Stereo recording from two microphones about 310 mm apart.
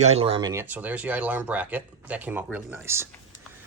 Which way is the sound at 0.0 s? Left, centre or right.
Centre.